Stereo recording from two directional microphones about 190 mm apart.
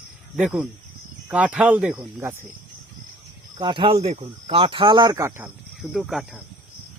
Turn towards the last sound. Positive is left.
turn(degrees=0)  # may be behind; listen again after turning